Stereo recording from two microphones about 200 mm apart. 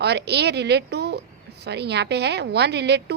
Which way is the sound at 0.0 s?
55° right (ahead or behind).